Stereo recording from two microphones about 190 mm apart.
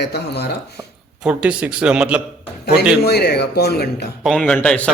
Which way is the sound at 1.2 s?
5° right (ahead or behind).